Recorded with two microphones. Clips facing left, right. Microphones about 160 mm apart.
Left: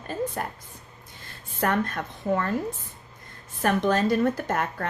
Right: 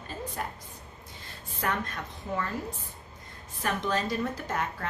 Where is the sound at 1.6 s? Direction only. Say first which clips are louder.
Left 7 dB; 55° left (ahead or behind).